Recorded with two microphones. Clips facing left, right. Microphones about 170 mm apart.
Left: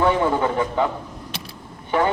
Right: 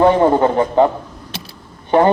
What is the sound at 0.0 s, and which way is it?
Speech, 40° right (ahead or behind).